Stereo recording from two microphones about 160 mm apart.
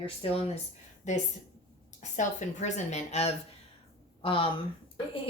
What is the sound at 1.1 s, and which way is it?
A woman's voice, 45° left (ahead or behind).